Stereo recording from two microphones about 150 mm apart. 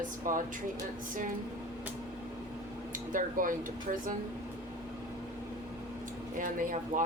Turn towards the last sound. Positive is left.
turn(degrees=-60)  # may be behind; listen again after turning